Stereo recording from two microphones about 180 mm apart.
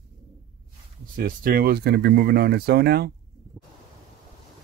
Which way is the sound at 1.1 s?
55° right (ahead or behind).